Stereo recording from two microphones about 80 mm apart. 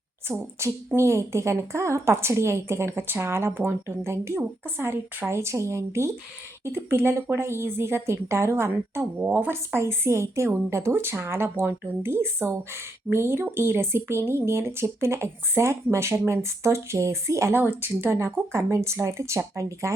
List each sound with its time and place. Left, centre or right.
0.3 s a woman's voice: centre
0.9 s speech: right
17.6 s speech: right